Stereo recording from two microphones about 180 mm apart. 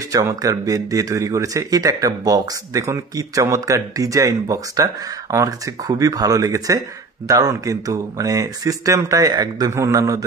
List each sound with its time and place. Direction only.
0.1 s speech: 20° right (ahead or behind)